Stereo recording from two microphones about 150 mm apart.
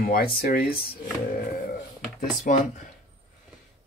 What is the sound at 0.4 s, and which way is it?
Speech, 80° left.